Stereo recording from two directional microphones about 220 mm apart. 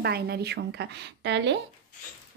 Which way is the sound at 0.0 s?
50° right (ahead or behind).